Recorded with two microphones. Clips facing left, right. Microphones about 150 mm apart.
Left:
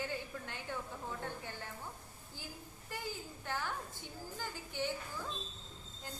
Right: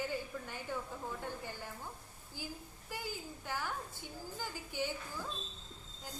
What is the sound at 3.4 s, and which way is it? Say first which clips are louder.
A woman's voice: left 1 dB; 10° right (ahead or behind).